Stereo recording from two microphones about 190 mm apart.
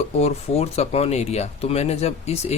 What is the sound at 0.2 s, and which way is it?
Speech, 35° left (ahead or behind).